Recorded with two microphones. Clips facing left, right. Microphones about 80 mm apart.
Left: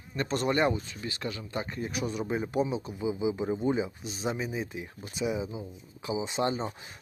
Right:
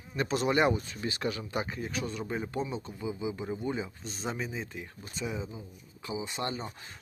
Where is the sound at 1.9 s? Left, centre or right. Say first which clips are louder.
Left 3 dB; centre.